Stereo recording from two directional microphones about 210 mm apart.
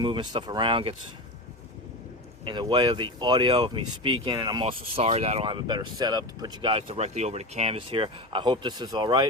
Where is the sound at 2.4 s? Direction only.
20° right (ahead or behind).